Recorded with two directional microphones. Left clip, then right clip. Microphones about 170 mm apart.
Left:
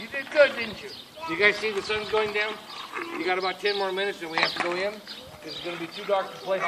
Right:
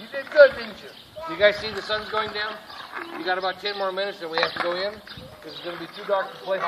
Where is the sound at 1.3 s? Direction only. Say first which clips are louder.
Right 2 dB; 5° right (ahead or behind).